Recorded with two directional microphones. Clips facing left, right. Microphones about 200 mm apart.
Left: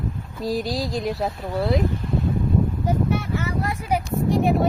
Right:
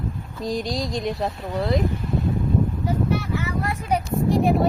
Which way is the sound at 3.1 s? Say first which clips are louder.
Even; 50° left (ahead or behind).